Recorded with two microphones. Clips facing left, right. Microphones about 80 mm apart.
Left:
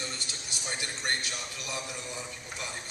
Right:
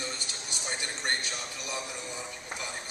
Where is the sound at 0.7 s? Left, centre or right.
Right.